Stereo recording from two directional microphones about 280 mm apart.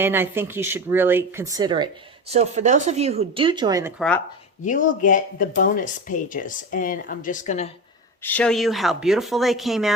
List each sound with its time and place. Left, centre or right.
0.0 s speech: centre
4.6 s speech: left
8.2 s speech: centre